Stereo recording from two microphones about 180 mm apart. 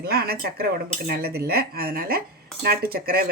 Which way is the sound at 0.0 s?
60° right (ahead or behind).